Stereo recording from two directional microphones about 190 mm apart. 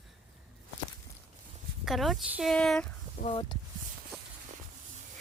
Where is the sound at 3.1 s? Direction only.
30° left (ahead or behind).